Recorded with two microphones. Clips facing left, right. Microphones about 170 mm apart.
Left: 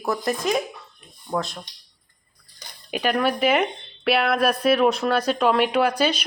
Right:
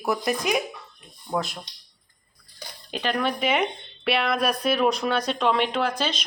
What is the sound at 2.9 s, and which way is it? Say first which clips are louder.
Speech: left 4 dB; 5° left (ahead or behind).